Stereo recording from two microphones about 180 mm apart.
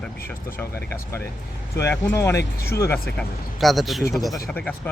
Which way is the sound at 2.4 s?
60° left (ahead or behind).